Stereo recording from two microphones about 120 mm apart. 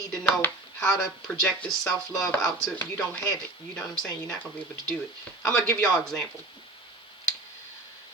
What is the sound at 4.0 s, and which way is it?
Speech, 35° left (ahead or behind).